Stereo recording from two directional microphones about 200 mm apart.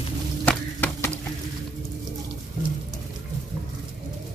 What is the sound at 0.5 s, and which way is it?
Horse, 10° left (ahead or behind).